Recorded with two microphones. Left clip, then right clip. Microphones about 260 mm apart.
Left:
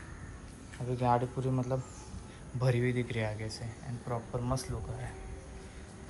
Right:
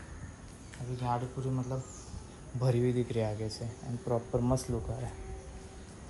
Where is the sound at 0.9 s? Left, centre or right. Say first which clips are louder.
Left 5 dB; centre; by 4.7 s right.